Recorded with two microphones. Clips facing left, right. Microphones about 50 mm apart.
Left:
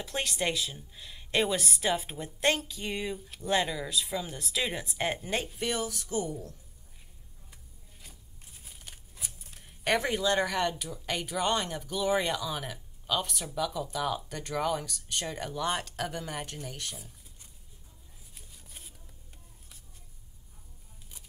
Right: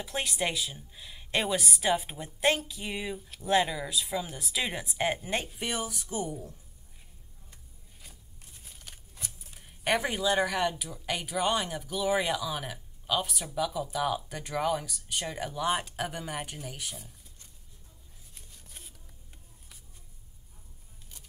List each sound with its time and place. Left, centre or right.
0.0 s speech: centre
8.6 s speech: centre
18.3 s a sound: centre